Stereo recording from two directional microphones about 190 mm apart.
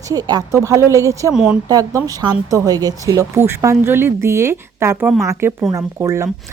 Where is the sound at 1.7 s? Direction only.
15° right (ahead or behind).